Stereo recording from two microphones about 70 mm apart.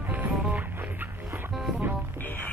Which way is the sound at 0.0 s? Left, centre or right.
Right.